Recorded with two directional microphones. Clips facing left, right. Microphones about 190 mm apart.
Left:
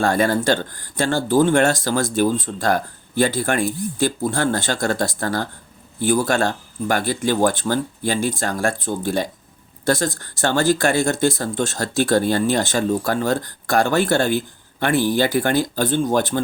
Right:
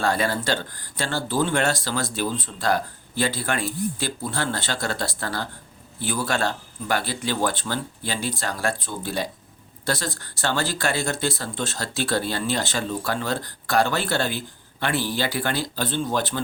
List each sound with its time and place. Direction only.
0.0 s speech: 50° left (ahead or behind)